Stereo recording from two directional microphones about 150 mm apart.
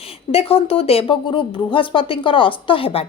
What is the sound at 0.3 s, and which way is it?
Speech, 40° left (ahead or behind).